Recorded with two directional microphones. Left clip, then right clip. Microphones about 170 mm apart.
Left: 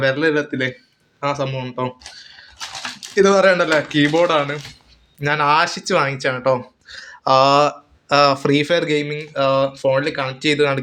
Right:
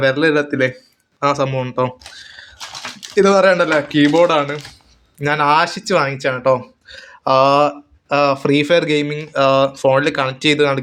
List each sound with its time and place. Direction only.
0.0 s speech: 15° right (ahead or behind)
3.2 s speech: 10° right (ahead or behind)